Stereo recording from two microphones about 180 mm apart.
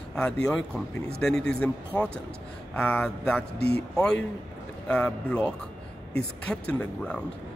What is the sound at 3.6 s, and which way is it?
Speech, 65° left (ahead or behind).